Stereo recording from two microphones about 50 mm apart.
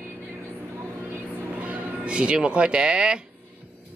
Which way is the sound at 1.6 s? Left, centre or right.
Right.